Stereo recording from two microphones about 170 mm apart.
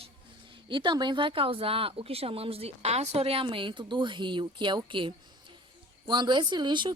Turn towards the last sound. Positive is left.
turn(degrees=-25)  # may be behind; listen again after turning